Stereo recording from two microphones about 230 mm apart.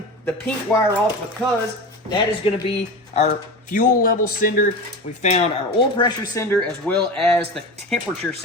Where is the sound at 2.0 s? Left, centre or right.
Left.